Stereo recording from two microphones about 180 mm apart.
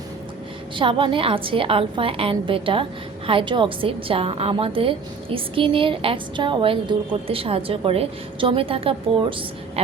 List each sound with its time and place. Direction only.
0.8 s a woman's voice: 30° right (ahead or behind)